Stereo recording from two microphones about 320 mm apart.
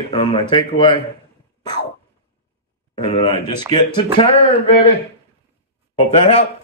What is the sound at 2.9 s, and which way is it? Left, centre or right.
Speech, centre.